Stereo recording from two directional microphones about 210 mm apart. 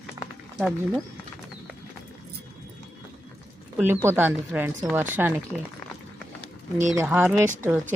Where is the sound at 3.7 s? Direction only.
10° right (ahead or behind).